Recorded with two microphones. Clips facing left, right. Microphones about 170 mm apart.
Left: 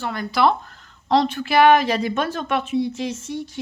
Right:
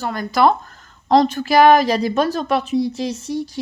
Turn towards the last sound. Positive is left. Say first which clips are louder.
# right 4 dB
turn(degrees=-35)  # may be behind; listen again after turning